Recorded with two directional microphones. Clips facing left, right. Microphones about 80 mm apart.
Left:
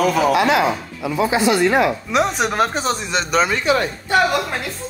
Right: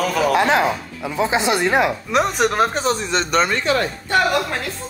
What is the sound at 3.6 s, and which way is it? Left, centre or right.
Speech, centre.